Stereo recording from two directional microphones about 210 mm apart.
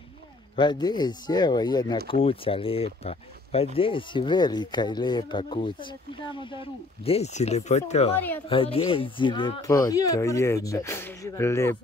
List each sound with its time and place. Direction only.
0.6 s speech: 20° left (ahead or behind)